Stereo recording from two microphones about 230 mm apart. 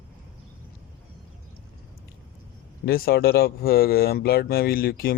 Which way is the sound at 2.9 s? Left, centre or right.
Left.